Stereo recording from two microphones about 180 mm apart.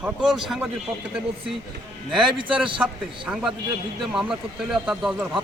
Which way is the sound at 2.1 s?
Centre (ahead or behind).